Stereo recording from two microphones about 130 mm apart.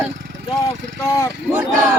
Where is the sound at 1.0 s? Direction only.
20° left (ahead or behind).